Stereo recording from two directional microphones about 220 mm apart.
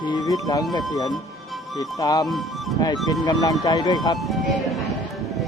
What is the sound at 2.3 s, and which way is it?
Speech, centre (ahead or behind).